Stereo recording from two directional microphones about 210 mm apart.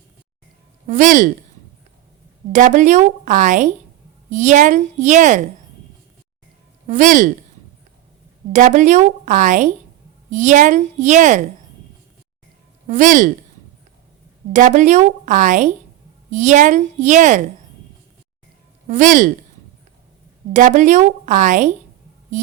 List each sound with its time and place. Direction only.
0.9 s a woman's voice: 35° right (ahead or behind)
2.5 s a woman's voice: 35° right (ahead or behind)
6.8 s a woman's voice: 35° right (ahead or behind)
8.5 s a woman's voice: 35° right (ahead or behind)
12.9 s a woman's voice: 35° right (ahead or behind)
14.5 s a woman's voice: 35° right (ahead or behind)
18.9 s a woman's voice: 35° right (ahead or behind)
20.5 s a woman's voice: 35° right (ahead or behind)